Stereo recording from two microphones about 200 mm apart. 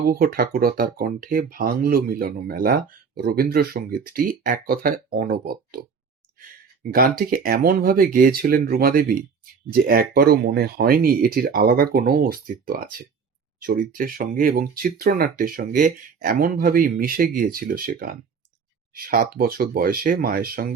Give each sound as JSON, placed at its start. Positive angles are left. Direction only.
{"t": 0.1, "sound": "speech", "side_deg": -50}
{"t": 6.9, "sound": "speech", "side_deg": -45}